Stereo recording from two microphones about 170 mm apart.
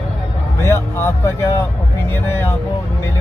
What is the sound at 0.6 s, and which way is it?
Speech, 15° left (ahead or behind).